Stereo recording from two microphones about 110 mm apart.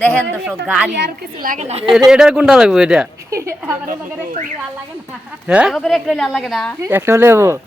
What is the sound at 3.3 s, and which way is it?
Speech, 30° right (ahead or behind).